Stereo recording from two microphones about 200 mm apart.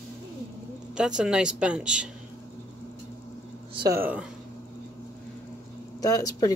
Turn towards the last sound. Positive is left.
turn(degrees=15)  # may be behind; listen again after turning